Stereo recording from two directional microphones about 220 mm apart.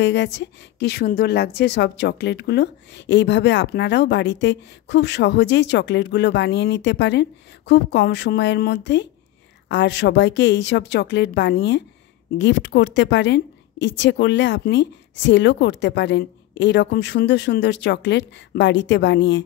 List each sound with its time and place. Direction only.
0.0 s a woman's voice: 55° left (ahead or behind)